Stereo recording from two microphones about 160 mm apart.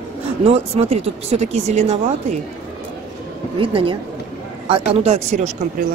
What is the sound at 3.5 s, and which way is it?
A woman's voice, 35° right (ahead or behind).